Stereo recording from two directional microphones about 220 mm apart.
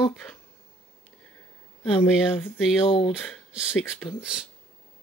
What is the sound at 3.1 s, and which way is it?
Speech, centre (ahead or behind).